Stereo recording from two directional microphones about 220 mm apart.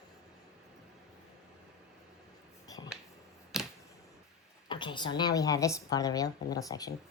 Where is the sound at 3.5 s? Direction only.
Centre (ahead or behind).